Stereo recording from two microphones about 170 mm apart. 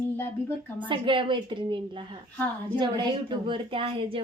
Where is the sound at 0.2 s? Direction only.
10° left (ahead or behind).